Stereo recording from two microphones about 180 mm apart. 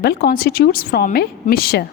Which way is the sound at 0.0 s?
60° left (ahead or behind).